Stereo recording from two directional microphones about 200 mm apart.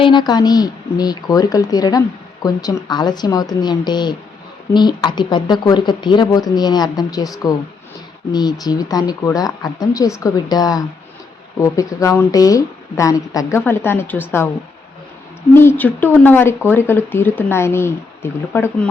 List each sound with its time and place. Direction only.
0.0 s a woman's voice: 20° left (ahead or behind)
15.5 s speech: 10° left (ahead or behind)